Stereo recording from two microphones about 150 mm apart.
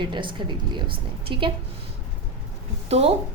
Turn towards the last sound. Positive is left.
turn(degrees=-45)  # may be behind; listen again after turning